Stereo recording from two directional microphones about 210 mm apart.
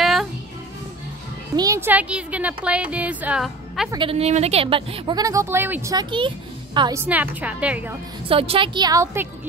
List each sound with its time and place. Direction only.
0.0 s music: centre (ahead or behind)
1.6 s speech: 15° right (ahead or behind)
3.9 s a woman's voice: 25° right (ahead or behind); by 7.9 s 5° right (ahead or behind)
8.3 s a woman's voice: 25° right (ahead or behind)